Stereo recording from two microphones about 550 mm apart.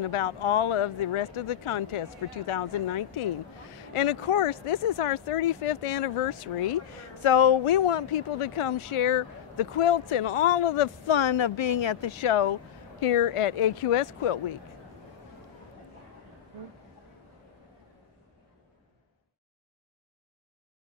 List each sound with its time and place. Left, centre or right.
0.0 s speech: left